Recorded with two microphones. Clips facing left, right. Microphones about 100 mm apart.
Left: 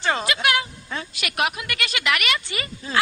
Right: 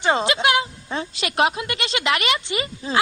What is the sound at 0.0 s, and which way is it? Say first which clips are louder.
A woman's voice: right 4 dB; 20° right (ahead or behind).